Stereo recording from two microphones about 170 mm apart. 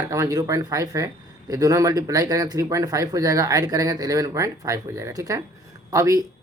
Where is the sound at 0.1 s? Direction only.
20° right (ahead or behind).